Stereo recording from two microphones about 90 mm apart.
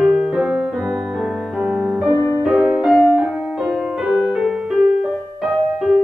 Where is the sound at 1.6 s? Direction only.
10° right (ahead or behind).